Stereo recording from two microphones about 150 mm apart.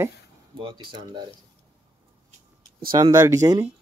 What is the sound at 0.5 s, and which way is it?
Speech, 30° right (ahead or behind).